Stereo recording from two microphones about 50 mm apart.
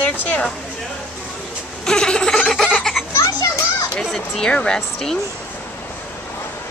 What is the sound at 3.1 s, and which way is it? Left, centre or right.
Children playing, left.